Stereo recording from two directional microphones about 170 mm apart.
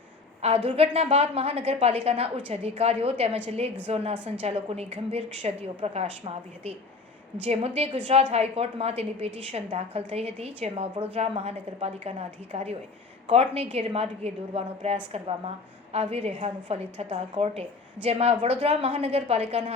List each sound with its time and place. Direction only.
0.4 s a woman's voice: 35° right (ahead or behind)